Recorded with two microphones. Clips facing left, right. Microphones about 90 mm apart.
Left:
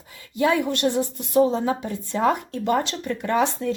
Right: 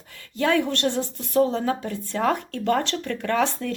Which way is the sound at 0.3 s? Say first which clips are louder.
Left 1 dB; 10° left (ahead or behind).